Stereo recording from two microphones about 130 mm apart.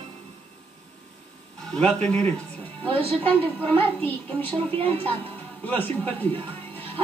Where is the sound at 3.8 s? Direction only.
15° left (ahead or behind).